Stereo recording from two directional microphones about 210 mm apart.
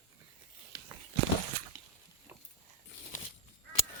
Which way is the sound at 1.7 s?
20° left (ahead or behind).